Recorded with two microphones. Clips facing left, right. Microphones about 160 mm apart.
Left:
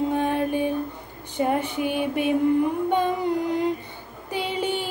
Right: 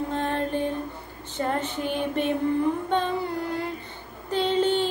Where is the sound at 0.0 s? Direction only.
10° left (ahead or behind).